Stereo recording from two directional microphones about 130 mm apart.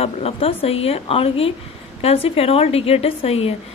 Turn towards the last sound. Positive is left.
turn(degrees=50)  # may be behind; listen again after turning